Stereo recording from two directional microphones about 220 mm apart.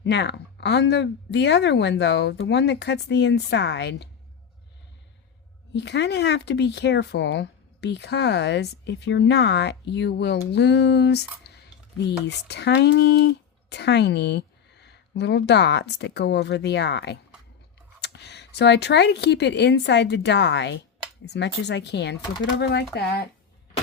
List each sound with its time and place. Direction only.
0.0 s speech: 50° left (ahead or behind)
5.7 s speech: 50° left (ahead or behind)